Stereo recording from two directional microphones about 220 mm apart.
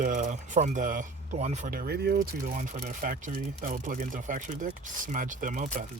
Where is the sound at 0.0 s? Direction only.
35° right (ahead or behind).